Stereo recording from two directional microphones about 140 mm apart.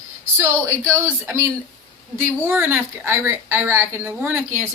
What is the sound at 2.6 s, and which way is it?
A woman's voice, 15° right (ahead or behind).